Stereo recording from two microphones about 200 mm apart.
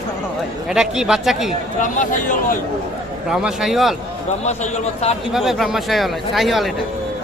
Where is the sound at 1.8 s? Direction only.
40° left (ahead or behind).